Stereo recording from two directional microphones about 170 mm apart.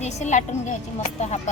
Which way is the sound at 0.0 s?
45° left (ahead or behind).